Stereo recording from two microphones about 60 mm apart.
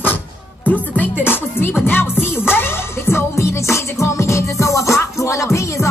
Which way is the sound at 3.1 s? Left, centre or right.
Left.